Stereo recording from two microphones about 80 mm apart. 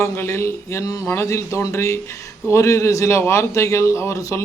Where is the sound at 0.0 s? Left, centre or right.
Left.